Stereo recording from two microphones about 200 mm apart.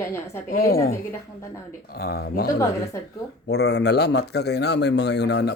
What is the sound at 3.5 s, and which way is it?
Speech, 55° left (ahead or behind).